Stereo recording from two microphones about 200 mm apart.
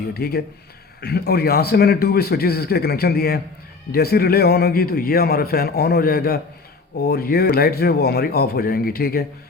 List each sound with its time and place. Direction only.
0.1 s a man's voice: 50° left (ahead or behind)